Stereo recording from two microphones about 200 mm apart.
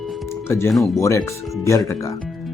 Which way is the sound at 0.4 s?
10° left (ahead or behind).